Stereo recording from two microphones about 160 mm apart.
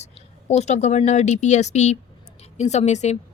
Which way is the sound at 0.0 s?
45° left (ahead or behind).